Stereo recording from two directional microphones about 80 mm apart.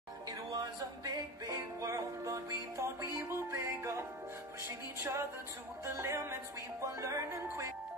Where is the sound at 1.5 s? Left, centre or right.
Right.